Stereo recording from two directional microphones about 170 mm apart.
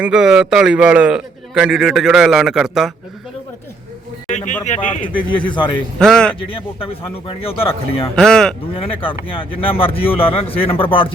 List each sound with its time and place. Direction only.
0.0 s a man's voice: 5° right (ahead or behind)
4.3 s speech: 45° left (ahead or behind)
5.5 s a man's voice: 30° left (ahead or behind)
6.0 s a man's voice: 5° left (ahead or behind)
6.5 s speech: 35° left (ahead or behind)
8.1 s a man's voice: 5° left (ahead or behind)
8.7 s speech: 30° left (ahead or behind)